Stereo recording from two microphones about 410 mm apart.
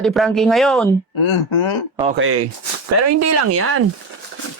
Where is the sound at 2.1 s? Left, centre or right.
Right.